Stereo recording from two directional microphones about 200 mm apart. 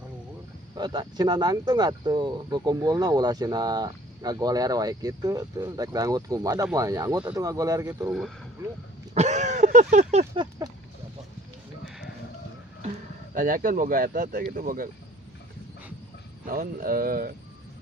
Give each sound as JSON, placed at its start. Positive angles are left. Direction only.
{"t": 0.8, "sound": "speech", "side_deg": -20}
{"t": 9.1, "sound": "a sound", "side_deg": -35}
{"t": 13.3, "sound": "speech", "side_deg": -45}
{"t": 16.5, "sound": "speech", "side_deg": -45}